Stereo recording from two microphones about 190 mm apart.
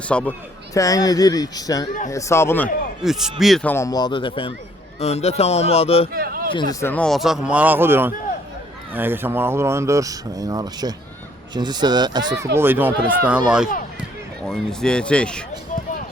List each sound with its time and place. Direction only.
0.1 s a man's voice: 5° left (ahead or behind)
0.7 s a man's voice: 15° left (ahead or behind)
3.0 s a man's voice: centre (ahead or behind); by 6.1 s 30° left (ahead or behind)
6.1 s speech: 50° right (ahead or behind)
6.5 s a man's voice: 20° left (ahead or behind); by 12.2 s 20° right (ahead or behind)
12.5 s speech: 10° right (ahead or behind)
14.4 s a man's voice: 5° left (ahead or behind)